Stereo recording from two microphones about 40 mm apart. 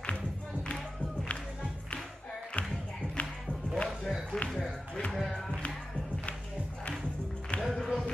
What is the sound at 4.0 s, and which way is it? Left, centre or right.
Run, centre.